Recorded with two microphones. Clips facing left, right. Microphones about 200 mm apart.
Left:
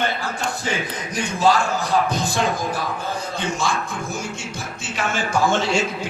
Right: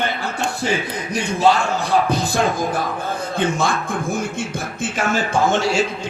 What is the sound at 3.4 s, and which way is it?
Speech, 55° right (ahead or behind).